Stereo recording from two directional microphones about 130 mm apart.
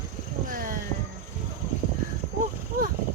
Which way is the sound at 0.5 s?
90° right.